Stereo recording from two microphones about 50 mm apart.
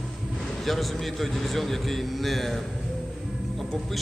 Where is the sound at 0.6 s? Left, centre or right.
Centre.